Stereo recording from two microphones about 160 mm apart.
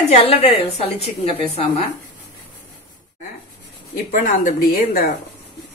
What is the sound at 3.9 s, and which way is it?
Speech, 60° left (ahead or behind).